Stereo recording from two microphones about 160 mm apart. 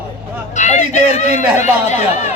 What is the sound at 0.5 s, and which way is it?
Speech, 45° left (ahead or behind).